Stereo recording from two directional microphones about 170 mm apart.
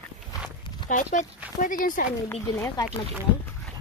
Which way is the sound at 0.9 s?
45° left (ahead or behind).